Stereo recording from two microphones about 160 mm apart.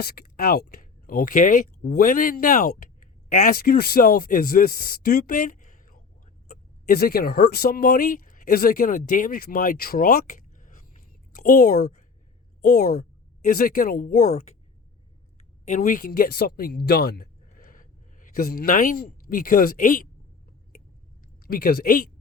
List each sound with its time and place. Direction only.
0.0 s speech: 75° left (ahead or behind); by 6.0 s 55° left (ahead or behind)
6.5 s speech: 70° left (ahead or behind)
15.6 s speech: 50° left (ahead or behind)
21.4 s speech: 70° left (ahead or behind)